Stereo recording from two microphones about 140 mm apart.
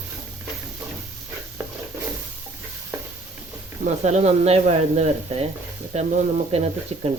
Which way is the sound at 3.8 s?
55° right (ahead or behind).